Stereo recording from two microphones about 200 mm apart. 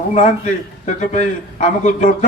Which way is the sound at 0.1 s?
35° left (ahead or behind).